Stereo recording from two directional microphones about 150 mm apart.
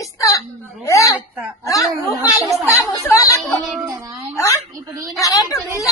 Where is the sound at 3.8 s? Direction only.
20° right (ahead or behind).